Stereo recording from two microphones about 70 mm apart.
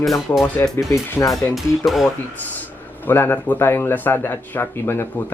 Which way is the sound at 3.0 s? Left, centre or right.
Left.